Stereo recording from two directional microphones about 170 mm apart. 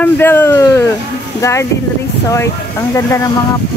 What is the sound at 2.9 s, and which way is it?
Speech, 20° left (ahead or behind).